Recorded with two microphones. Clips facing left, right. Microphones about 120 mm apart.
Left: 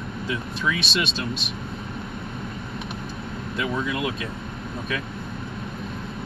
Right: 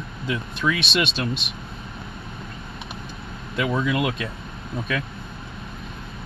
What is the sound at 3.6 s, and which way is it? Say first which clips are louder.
Speech: right 4 dB; 80° right.